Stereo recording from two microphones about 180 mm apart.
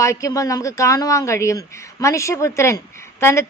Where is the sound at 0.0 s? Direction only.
20° left (ahead or behind).